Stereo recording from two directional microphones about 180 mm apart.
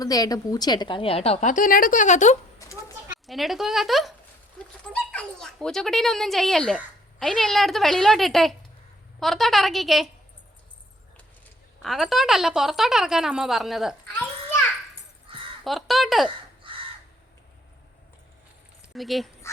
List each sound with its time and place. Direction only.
0.0 s a woman's voice: 20° left (ahead or behind); by 2.4 s 40° left (ahead or behind)
3.2 s speech: centre (ahead or behind)
11.8 s speech: centre (ahead or behind)
15.3 s a sound: 30° right (ahead or behind)
15.6 s speech: centre (ahead or behind)
16.7 s crow: 30° right (ahead or behind)
18.9 s speech: centre (ahead or behind)